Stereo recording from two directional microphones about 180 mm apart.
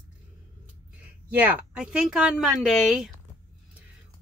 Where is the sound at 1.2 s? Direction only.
10° right (ahead or behind).